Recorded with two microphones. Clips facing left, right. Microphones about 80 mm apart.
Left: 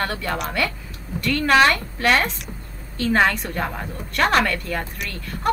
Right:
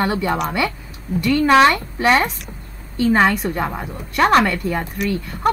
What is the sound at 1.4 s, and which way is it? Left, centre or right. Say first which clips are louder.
Speech: right 3 dB; centre.